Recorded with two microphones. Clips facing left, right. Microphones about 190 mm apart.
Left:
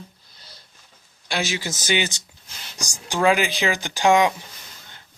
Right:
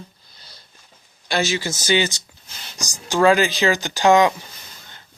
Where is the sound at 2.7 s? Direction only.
20° right (ahead or behind).